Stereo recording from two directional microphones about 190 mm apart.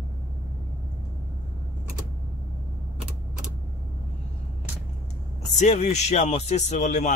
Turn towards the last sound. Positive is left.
turn(degrees=40)  # may be behind; listen again after turning